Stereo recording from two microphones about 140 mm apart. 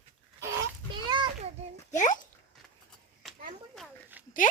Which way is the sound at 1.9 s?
60° left (ahead or behind).